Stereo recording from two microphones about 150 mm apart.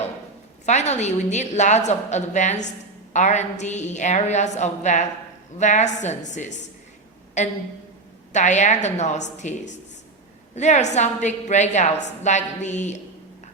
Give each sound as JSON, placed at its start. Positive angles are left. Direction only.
{"t": 0.6, "sound": "a woman's voice", "side_deg": 50}
{"t": 8.3, "sound": "a woman's voice", "side_deg": 50}